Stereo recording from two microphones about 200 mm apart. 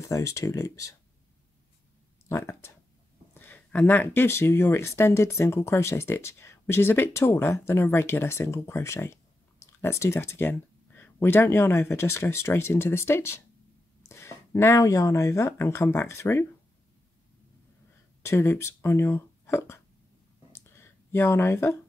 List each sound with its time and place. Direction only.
0.0 s speech: 15° left (ahead or behind)
2.2 s speech: 15° left (ahead or behind)
18.2 s speech: 15° left (ahead or behind)
20.5 s a sound: 10° left (ahead or behind)